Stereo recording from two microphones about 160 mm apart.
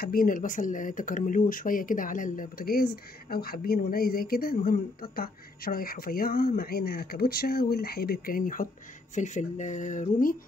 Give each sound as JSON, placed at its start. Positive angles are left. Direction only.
{"t": 0.0, "sound": "speech", "side_deg": 65}
{"t": 9.1, "sound": "speech", "side_deg": 50}